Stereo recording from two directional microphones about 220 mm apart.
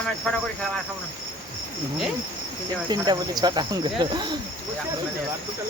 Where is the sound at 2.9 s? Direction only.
20° right (ahead or behind).